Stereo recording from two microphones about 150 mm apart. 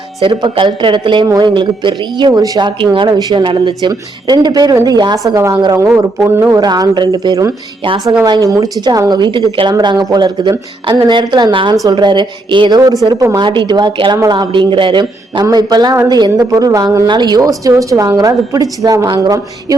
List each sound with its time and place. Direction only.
0.2 s a woman's voice: 35° right (ahead or behind); by 6.6 s 15° right (ahead or behind)
6.6 s speech: 30° right (ahead or behind)
7.9 s a woman's voice: centre (ahead or behind)
8.2 s speech: 25° right (ahead or behind)